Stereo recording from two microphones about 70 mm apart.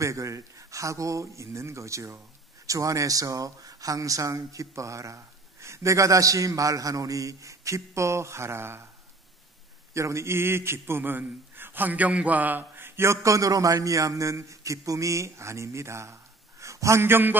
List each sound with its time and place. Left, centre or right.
0.0 s speech: right
9.9 s speech: right